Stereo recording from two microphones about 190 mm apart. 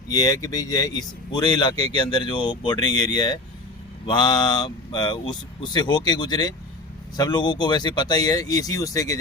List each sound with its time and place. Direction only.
0.1 s speech: 20° left (ahead or behind)